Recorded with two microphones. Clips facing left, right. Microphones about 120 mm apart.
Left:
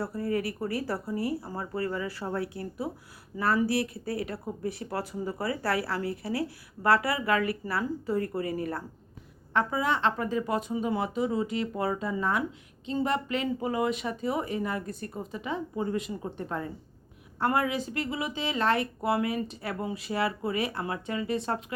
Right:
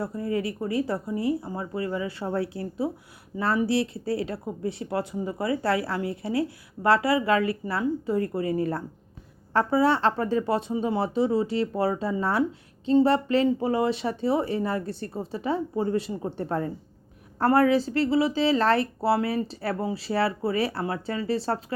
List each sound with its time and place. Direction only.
0.0 s speech: 20° right (ahead or behind)